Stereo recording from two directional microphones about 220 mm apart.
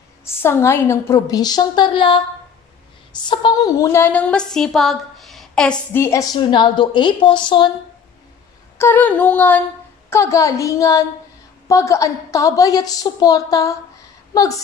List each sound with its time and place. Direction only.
0.4 s a woman's voice: 10° left (ahead or behind)
8.7 s a woman's voice: 10° left (ahead or behind)